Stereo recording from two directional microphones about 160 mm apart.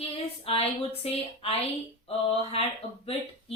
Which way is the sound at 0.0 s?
40° left (ahead or behind).